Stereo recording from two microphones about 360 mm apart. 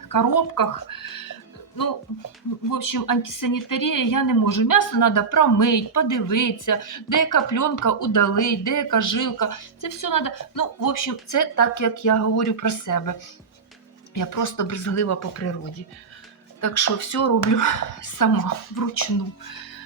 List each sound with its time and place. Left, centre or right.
0.1 s a woman's voice: left
16.6 s speech: left